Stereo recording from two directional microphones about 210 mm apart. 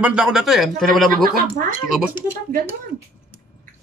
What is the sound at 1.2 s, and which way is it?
Speech, 45° right (ahead or behind).